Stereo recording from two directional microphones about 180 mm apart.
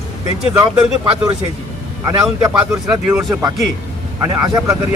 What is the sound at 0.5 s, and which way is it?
Speech, 10° right (ahead or behind).